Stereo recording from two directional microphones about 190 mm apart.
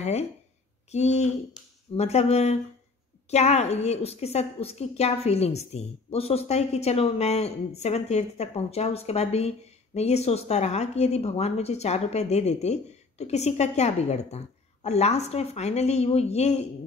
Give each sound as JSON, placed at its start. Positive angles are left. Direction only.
{"t": 0.0, "sound": "a woman's voice", "side_deg": 35}